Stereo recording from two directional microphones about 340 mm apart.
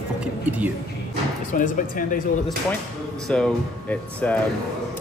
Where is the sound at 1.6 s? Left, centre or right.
Left.